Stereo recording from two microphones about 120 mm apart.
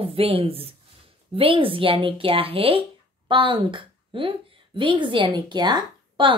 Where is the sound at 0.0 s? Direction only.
50° right (ahead or behind).